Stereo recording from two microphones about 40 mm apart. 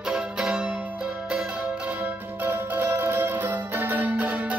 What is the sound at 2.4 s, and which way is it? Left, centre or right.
Music, right.